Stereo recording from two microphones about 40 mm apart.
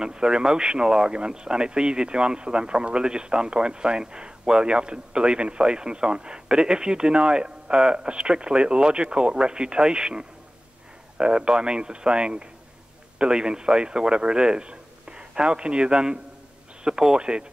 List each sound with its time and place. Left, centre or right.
0.0 s a man's voice: centre